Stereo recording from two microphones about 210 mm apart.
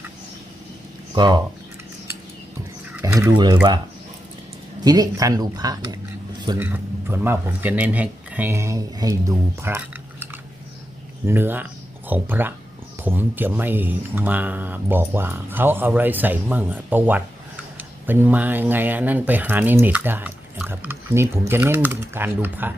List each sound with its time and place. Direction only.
1.1 s speech: 20° right (ahead or behind)
2.9 s a sound: 15° right (ahead or behind)
4.8 s speech: 15° right (ahead or behind)
11.3 s speech: 10° right (ahead or behind)